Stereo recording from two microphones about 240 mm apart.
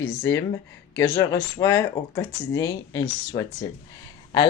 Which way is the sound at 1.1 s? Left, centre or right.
Centre.